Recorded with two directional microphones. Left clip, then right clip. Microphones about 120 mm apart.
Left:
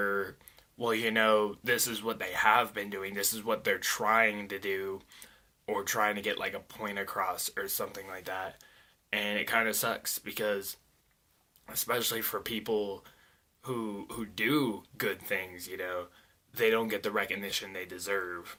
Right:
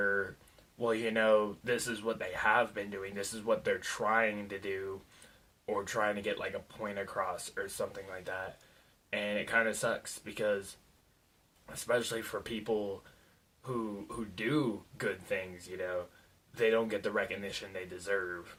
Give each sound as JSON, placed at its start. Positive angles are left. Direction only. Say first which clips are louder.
{"t": 0.0, "sound": "a sound", "louder": "even", "side_deg": 30}
{"t": 0.8, "sound": "speech", "louder": "left 3 dB", "side_deg": 20}
{"t": 7.1, "sound": "speech", "louder": "left 3 dB", "side_deg": 30}
{"t": 11.9, "sound": "speech", "louder": "left 1 dB", "side_deg": 25}